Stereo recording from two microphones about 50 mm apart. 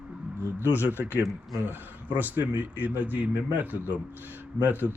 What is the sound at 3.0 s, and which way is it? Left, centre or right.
A man's voice, right.